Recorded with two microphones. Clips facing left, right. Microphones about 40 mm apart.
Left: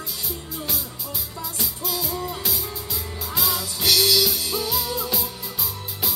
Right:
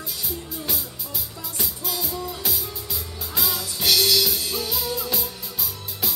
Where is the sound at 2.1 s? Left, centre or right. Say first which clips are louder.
Left 2 dB; left.